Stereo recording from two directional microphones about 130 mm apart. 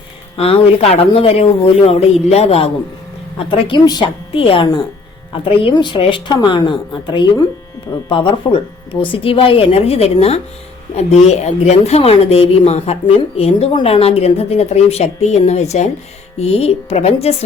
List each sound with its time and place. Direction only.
0.3 s speech: 50° left (ahead or behind)
3.8 s a woman's voice: 30° left (ahead or behind)
4.4 s a woman's voice: 45° left (ahead or behind)